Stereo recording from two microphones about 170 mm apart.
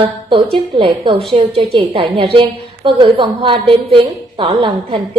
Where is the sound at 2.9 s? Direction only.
30° right (ahead or behind).